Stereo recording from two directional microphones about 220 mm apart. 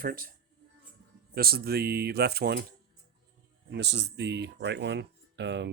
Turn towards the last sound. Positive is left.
turn(degrees=-55)  # may be behind; listen again after turning